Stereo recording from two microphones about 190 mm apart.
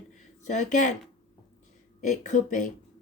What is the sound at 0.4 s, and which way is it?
Speech, 40° left (ahead or behind).